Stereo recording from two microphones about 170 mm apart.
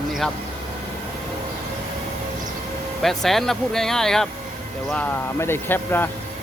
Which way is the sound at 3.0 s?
Centre (ahead or behind).